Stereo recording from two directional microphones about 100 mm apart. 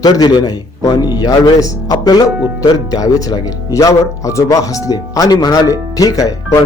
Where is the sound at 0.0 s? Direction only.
40° left (ahead or behind).